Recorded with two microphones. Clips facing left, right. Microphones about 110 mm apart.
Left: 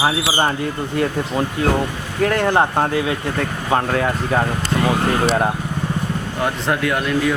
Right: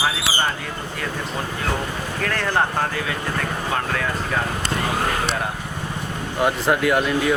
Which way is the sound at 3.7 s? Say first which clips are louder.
Left 8 dB; 35° left (ahead or behind).